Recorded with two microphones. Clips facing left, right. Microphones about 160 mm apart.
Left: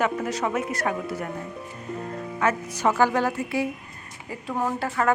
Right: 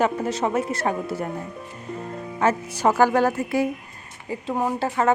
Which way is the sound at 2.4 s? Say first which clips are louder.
Right 3 dB; 30° right (ahead or behind).